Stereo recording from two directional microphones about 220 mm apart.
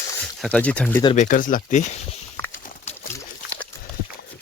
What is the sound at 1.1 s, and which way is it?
Speech, 35° left (ahead or behind).